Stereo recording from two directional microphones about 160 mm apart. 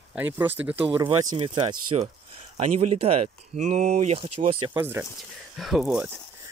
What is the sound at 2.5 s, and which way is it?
Speech, 45° right (ahead or behind).